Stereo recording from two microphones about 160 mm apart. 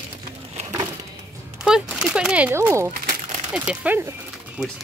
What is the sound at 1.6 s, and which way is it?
Speech, 5° right (ahead or behind).